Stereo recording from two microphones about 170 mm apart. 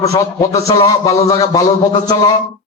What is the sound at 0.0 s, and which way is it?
A man's voice, 20° left (ahead or behind).